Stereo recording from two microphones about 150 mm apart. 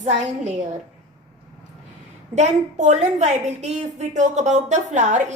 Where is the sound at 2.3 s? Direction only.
50° right (ahead or behind).